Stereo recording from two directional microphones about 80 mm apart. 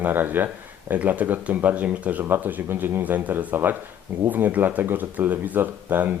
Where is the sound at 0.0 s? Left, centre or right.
Right.